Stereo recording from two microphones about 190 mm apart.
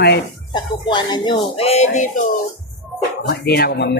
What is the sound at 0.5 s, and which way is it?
Speech, 20° left (ahead or behind).